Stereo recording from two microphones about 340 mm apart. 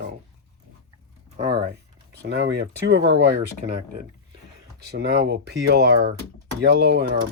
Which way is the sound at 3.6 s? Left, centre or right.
Centre.